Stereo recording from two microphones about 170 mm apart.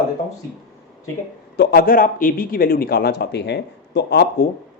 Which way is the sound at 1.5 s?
70° left (ahead or behind).